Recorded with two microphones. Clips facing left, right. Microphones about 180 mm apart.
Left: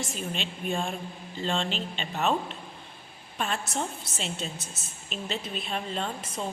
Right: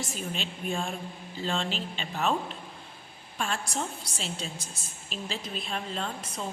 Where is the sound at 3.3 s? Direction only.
5° left (ahead or behind).